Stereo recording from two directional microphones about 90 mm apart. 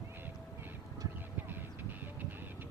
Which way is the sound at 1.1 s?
20° right (ahead or behind).